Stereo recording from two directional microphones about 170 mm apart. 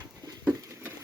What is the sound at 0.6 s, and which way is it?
Patter, 15° right (ahead or behind).